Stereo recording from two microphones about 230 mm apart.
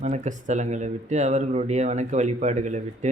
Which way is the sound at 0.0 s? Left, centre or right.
Right.